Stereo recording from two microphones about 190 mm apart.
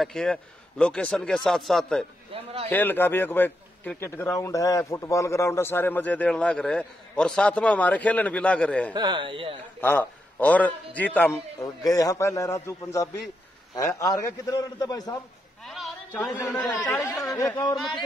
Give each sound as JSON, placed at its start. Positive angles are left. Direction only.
{"t": 0.0, "sound": "a man's voice", "side_deg": 5}
{"t": 2.3, "sound": "a man's voice", "side_deg": -30}
{"t": 2.7, "sound": "a man's voice", "side_deg": 10}
{"t": 8.9, "sound": "speech", "side_deg": -25}
{"t": 9.8, "sound": "a man's voice", "side_deg": 10}
{"t": 15.6, "sound": "a sound", "side_deg": 0}
{"t": 16.4, "sound": "a man's voice", "side_deg": 10}